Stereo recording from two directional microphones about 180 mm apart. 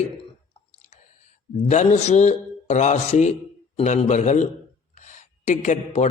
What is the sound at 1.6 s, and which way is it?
A man's voice, 40° left (ahead or behind).